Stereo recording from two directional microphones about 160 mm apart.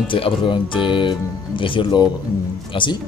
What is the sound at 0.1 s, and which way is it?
Speech, 30° left (ahead or behind).